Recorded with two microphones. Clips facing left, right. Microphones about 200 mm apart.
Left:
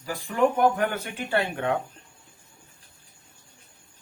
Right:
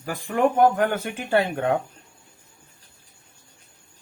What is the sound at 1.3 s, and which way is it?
Speech, 45° right (ahead or behind).